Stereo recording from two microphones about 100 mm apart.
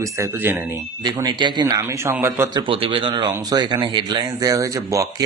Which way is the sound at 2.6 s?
65° right (ahead or behind).